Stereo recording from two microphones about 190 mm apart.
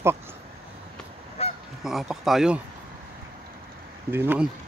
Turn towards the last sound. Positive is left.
turn(degrees=-10)  # may be behind; listen again after turning